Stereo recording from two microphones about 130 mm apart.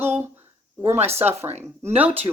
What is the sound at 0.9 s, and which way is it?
Speech, 55° right (ahead or behind).